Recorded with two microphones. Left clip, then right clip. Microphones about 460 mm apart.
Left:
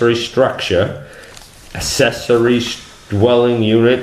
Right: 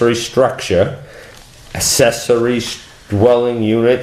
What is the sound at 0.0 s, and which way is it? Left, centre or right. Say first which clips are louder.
Speech: even; right.